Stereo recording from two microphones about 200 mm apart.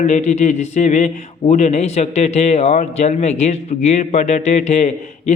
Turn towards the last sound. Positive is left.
turn(degrees=35)  # may be behind; listen again after turning